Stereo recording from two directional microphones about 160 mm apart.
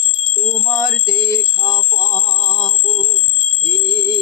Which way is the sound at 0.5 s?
20° left (ahead or behind).